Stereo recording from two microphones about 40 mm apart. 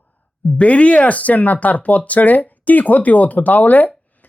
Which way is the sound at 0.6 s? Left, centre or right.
Left.